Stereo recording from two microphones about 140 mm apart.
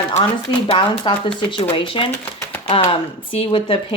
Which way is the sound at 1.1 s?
35° left (ahead or behind).